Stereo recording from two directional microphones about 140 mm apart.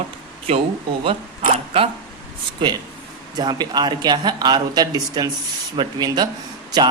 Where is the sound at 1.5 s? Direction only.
45° right (ahead or behind).